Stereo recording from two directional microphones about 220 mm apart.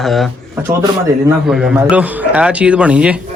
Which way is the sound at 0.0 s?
Centre (ahead or behind).